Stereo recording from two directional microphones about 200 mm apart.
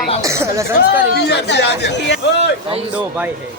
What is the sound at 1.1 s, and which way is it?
Speech, 55° left (ahead or behind).